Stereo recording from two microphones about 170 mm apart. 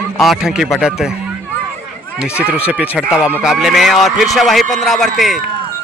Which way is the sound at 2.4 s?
10° right (ahead or behind).